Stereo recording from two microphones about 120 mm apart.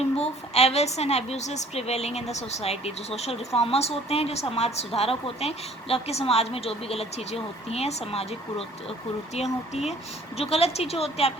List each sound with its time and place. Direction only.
0.2 s a woman's voice: 60° left (ahead or behind)